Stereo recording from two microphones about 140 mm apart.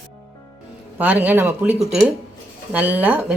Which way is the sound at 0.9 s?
10° right (ahead or behind).